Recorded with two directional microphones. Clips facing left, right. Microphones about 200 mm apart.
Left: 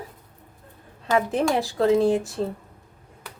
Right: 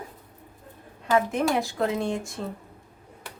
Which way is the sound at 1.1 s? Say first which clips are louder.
Left 1 dB; 35° left (ahead or behind).